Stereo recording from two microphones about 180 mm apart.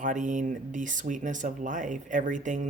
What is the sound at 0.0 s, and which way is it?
Speech, 45° right (ahead or behind).